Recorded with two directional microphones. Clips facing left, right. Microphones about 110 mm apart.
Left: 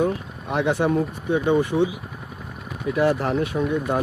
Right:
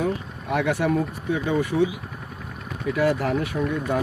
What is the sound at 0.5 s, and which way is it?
Speech, 20° left (ahead or behind).